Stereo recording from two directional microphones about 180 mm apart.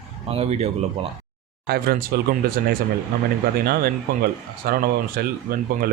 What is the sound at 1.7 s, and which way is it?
Speech, 55° right (ahead or behind).